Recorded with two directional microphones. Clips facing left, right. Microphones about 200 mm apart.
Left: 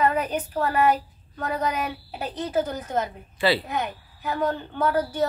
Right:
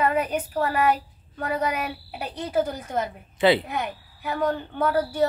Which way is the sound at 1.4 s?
10° right (ahead or behind).